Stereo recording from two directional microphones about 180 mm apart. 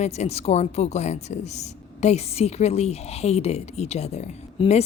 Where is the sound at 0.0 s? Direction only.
35° left (ahead or behind).